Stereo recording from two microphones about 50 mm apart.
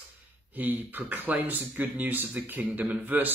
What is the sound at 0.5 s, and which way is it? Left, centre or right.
Speech, right.